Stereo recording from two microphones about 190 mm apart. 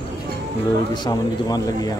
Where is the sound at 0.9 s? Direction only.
20° left (ahead or behind).